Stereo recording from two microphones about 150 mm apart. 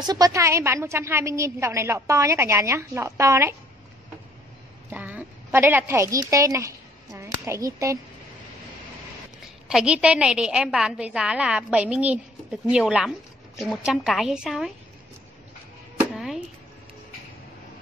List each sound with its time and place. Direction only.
0.0 s a woman's voice: 25° right (ahead or behind)
4.8 s a woman's voice: 10° right (ahead or behind)
9.7 s a woman's voice: 5° right (ahead or behind)
16.0 s a sound: 5° right (ahead or behind)